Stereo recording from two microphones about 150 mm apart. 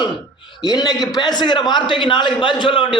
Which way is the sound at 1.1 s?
30° left (ahead or behind).